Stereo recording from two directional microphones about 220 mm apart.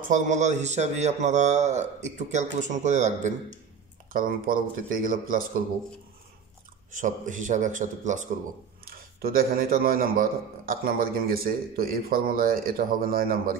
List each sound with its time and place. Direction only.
0.0 s a man's voice: 35° right (ahead or behind)
6.9 s a man's voice: 35° right (ahead or behind)